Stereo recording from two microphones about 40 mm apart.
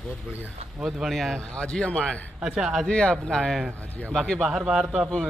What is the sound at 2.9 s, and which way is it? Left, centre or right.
Speech, left.